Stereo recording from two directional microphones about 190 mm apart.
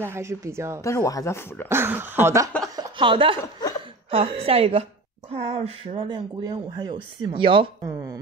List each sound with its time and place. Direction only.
0.0 s a woman's voice: 15° right (ahead or behind)
0.8 s speech: 15° left (ahead or behind)
1.7 s a woman's voice: 10° right (ahead or behind)
2.7 s a sound: 25° right (ahead or behind)
4.1 s speech: 30° right (ahead or behind)